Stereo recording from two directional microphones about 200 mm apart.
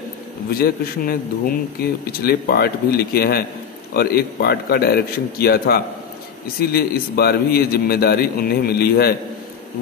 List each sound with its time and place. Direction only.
0.6 s a man's voice: 50° left (ahead or behind)